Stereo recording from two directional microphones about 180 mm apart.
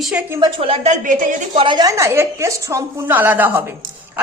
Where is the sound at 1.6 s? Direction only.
25° right (ahead or behind).